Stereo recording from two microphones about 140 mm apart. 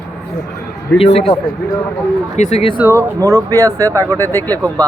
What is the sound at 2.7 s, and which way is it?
Speech, 20° right (ahead or behind).